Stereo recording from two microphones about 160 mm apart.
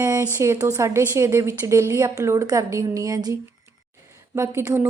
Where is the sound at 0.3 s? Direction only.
15° right (ahead or behind).